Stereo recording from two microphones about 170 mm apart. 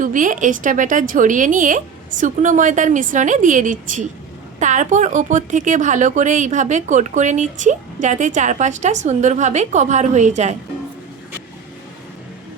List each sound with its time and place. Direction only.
0.0 s speech: 50° right (ahead or behind)